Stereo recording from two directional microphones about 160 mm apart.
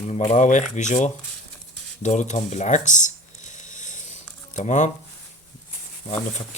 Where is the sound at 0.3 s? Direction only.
50° left (ahead or behind).